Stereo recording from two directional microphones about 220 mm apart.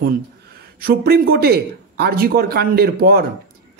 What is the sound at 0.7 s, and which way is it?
Speech, 45° right (ahead or behind).